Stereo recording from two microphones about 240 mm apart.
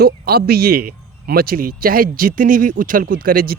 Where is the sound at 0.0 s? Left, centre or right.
Right.